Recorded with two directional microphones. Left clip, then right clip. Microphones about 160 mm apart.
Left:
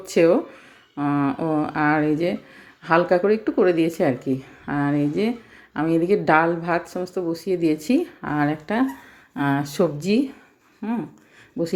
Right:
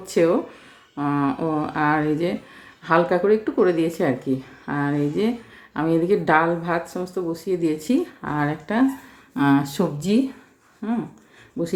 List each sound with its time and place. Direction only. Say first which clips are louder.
0.0 s speech: left 2 dB; 20° left (ahead or behind)